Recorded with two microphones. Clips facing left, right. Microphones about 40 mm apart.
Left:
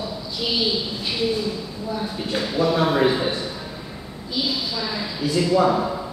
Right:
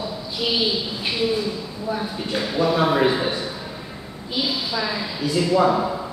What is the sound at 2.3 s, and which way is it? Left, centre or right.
Speech, centre.